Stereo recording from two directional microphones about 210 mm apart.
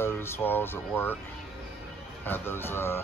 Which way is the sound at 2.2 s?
10° left (ahead or behind).